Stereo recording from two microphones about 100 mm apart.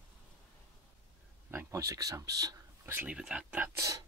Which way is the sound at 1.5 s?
30° right (ahead or behind).